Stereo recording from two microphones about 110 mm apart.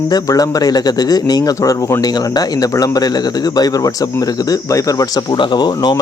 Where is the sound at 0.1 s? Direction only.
35° left (ahead or behind).